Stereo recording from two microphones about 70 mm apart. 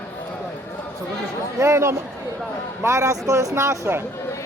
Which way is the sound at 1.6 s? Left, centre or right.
Right.